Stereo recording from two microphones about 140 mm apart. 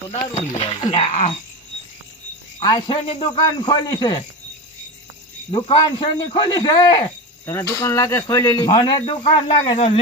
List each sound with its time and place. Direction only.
0.3 s speech: 45° left (ahead or behind)
2.6 s speech: 30° left (ahead or behind)
5.5 s speech: 40° left (ahead or behind)
7.4 s speech: 20° left (ahead or behind)
9.0 s speech: 40° left (ahead or behind)